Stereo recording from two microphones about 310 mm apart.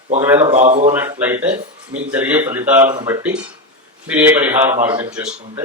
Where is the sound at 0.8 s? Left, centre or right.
Centre.